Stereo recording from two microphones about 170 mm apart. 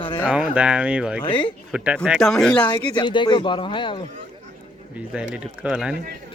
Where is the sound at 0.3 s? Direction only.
5° right (ahead or behind).